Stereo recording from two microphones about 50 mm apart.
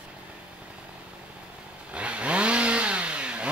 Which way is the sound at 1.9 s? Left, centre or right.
Right.